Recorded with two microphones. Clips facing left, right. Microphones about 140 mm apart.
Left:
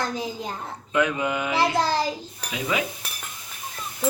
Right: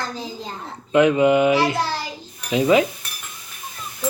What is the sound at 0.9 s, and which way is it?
Speech, 20° right (ahead or behind).